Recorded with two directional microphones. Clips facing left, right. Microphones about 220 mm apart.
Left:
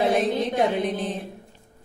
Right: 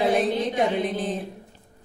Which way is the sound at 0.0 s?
Centre (ahead or behind).